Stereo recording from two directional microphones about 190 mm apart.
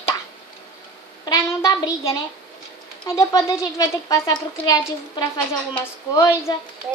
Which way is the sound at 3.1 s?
15° left (ahead or behind).